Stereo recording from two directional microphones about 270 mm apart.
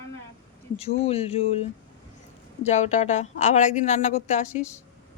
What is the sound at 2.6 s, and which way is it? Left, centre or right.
A woman's voice, left.